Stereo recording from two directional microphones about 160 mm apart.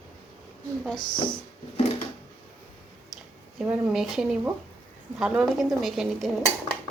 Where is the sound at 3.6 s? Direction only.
5° right (ahead or behind).